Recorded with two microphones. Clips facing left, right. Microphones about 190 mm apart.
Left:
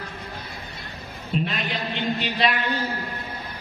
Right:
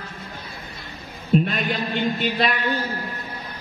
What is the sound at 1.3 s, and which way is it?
A man's voice, 45° right (ahead or behind).